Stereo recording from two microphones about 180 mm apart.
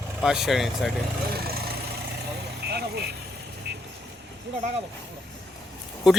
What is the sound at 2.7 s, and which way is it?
Vehicle, 60° right (ahead or behind).